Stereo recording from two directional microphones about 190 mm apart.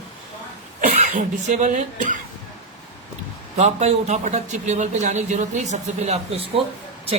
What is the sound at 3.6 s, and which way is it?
A man's voice, 35° right (ahead or behind).